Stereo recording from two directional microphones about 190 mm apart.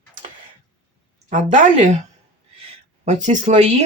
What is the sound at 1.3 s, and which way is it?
Speech, 40° right (ahead or behind).